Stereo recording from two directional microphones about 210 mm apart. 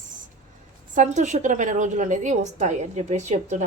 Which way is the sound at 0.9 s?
35° right (ahead or behind).